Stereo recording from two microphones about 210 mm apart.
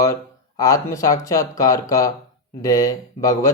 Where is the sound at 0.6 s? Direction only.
15° left (ahead or behind).